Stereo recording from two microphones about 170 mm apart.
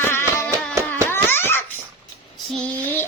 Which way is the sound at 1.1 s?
15° left (ahead or behind).